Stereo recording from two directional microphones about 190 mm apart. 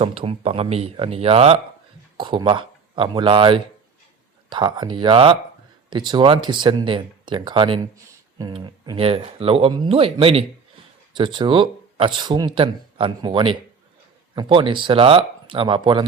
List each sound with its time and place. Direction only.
0.0 s speech: 30° right (ahead or behind)